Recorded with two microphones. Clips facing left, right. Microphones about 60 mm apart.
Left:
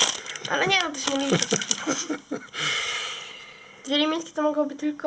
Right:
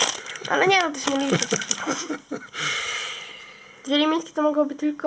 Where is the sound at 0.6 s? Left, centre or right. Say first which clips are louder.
Right 5 dB; right.